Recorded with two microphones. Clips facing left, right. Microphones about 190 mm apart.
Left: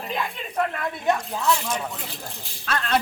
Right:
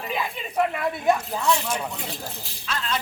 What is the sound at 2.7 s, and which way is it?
Speech, 60° left (ahead or behind).